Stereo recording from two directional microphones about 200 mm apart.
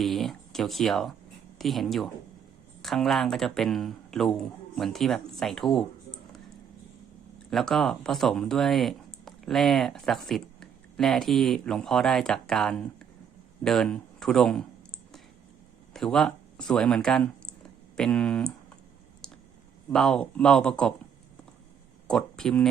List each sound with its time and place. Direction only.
0.0 s speech: centre (ahead or behind)
7.5 s speech: centre (ahead or behind)
15.9 s speech: centre (ahead or behind)
19.2 s a sound: 5° left (ahead or behind)
19.9 s speech: centre (ahead or behind)
22.0 s speech: 5° left (ahead or behind)